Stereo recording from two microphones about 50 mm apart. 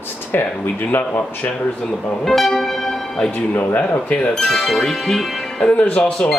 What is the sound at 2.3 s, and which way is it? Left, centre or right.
Music, centre.